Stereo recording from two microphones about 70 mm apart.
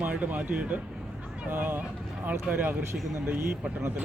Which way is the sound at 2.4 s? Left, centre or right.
Centre.